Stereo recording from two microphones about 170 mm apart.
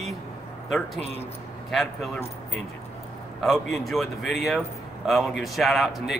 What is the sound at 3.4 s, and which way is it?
A man's voice, centre (ahead or behind).